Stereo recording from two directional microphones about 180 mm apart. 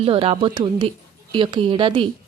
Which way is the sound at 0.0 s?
30° right (ahead or behind).